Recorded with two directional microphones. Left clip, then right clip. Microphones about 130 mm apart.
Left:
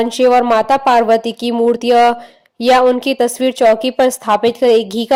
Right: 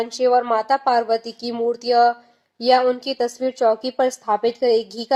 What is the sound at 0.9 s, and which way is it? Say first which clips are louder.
Speech: left 8 dB; 45° left (ahead or behind).